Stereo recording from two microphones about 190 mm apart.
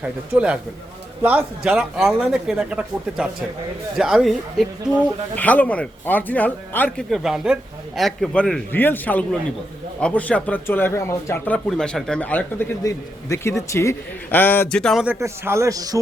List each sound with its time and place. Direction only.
0.0 s a man's voice: 5° right (ahead or behind)
15.0 s a man's voice: 10° right (ahead or behind)